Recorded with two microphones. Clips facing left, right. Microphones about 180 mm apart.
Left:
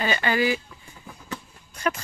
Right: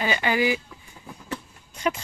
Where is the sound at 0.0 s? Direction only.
15° right (ahead or behind).